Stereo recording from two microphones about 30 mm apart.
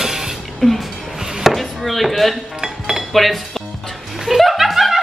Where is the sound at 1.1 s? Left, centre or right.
Centre.